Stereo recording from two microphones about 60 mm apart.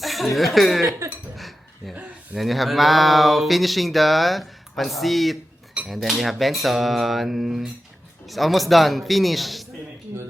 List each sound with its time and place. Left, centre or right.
0.0 s speech: centre
0.9 s a sound: right
1.4 s dishes: centre
2.3 s speech: centre